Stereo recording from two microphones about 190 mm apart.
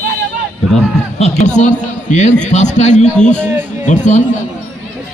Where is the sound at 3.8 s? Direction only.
40° left (ahead or behind).